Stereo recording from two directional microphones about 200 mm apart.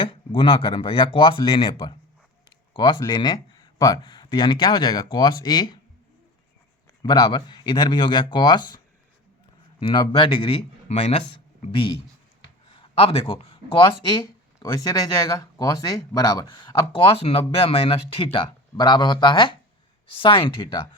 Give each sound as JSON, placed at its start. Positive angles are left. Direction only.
{"t": 0.0, "sound": "speech", "side_deg": 25}
{"t": 7.0, "sound": "speech", "side_deg": 20}
{"t": 9.8, "sound": "speech", "side_deg": 25}
{"t": 12.7, "sound": "a sound", "side_deg": 25}
{"t": 14.6, "sound": "speech", "side_deg": 15}